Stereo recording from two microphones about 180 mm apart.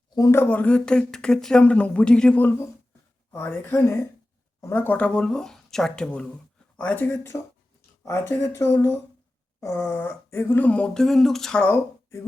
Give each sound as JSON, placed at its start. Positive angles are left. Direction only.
{"t": 0.1, "sound": "speech", "side_deg": 20}